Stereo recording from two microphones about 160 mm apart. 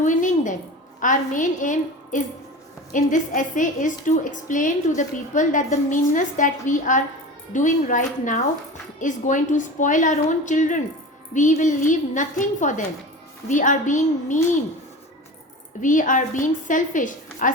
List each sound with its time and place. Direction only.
0.0 s a sound: 50° left (ahead or behind)
0.9 s a woman's voice: 55° left (ahead or behind)
15.8 s a woman's voice: 55° left (ahead or behind)